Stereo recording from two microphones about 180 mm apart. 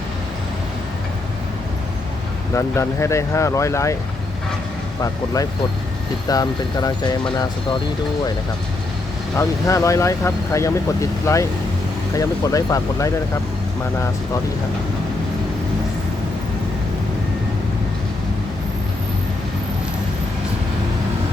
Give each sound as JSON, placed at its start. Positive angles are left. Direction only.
{"t": 2.6, "sound": "speech", "side_deg": 15}
{"t": 6.2, "sound": "speech", "side_deg": 20}
{"t": 9.4, "sound": "speech", "side_deg": 15}